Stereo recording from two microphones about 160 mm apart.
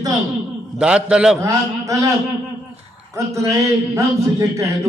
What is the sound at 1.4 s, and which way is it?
Speech, 20° right (ahead or behind).